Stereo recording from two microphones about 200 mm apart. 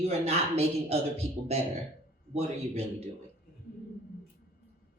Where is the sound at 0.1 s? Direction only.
30° right (ahead or behind).